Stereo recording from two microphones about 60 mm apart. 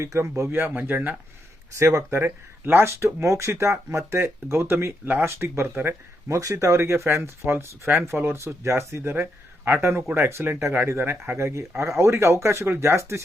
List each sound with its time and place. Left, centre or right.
0.0 s speech: right
0.6 s speech: right
1.8 s speech: right
2.1 s speech: right
5.0 s speech: right
5.3 s speech: right
6.2 s speech: right